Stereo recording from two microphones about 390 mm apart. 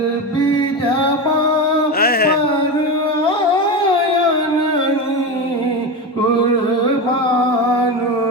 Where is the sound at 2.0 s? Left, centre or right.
Left.